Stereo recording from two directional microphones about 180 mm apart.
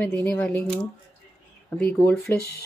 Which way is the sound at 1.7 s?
10° left (ahead or behind).